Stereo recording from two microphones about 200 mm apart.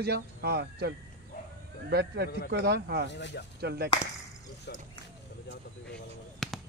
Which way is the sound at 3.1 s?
60° left (ahead or behind).